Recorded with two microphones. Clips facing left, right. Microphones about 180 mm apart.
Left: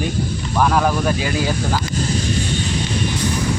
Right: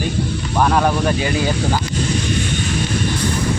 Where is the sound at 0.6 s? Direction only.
Centre (ahead or behind).